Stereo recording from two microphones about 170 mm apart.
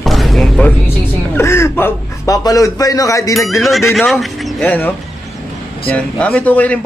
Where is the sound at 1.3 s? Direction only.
15° left (ahead or behind).